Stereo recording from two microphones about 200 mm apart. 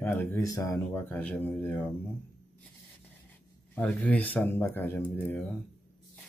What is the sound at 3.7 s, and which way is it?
Speech, 5° left (ahead or behind).